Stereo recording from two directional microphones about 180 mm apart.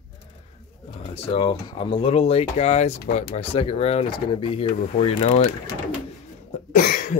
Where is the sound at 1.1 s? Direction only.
30° left (ahead or behind).